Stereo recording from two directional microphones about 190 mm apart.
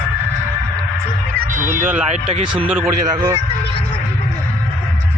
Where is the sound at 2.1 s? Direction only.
35° right (ahead or behind).